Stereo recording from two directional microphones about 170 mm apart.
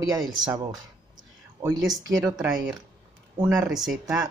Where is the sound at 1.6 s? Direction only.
20° right (ahead or behind).